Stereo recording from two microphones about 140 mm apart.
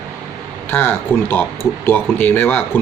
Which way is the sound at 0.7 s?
15° left (ahead or behind).